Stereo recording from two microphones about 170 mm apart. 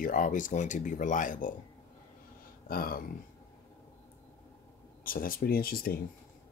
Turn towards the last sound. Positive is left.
turn(degrees=60)  # may be behind; listen again after turning